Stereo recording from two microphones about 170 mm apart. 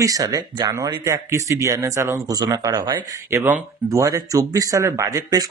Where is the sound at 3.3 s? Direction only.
10° right (ahead or behind).